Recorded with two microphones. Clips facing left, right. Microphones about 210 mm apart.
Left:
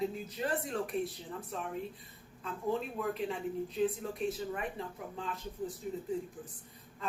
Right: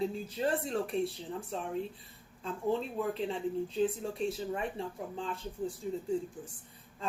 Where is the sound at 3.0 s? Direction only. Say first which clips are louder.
Right 2 dB; 30° right (ahead or behind).